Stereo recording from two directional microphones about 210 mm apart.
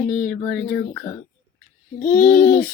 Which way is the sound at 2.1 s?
10° left (ahead or behind).